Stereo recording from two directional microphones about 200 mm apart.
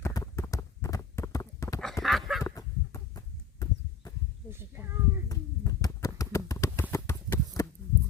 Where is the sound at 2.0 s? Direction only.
Centre (ahead or behind).